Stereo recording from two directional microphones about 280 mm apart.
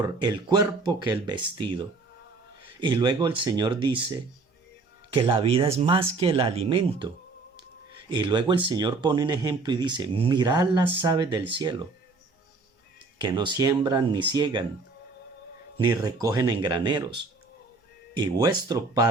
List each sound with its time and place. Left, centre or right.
0.0 s speech: centre
2.8 s speech: centre
8.1 s speech: centre
13.1 s speech: centre
15.8 s speech: centre
18.1 s speech: centre